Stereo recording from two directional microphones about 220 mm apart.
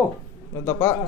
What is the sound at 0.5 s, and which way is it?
Speech, 10° left (ahead or behind).